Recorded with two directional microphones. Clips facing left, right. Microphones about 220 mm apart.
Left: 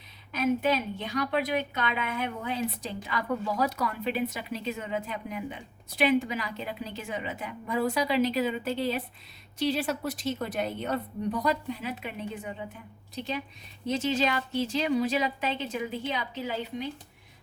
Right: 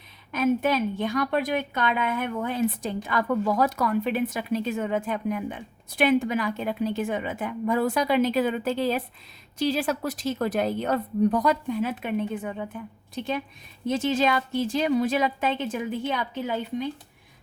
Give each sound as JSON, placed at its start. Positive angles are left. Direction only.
{"t": 0.3, "sound": "a woman's voice", "side_deg": -50}
{"t": 10.2, "sound": "speech", "side_deg": -90}
{"t": 11.4, "sound": "a woman's voice", "side_deg": -50}
{"t": 13.8, "sound": "a woman's voice", "side_deg": -50}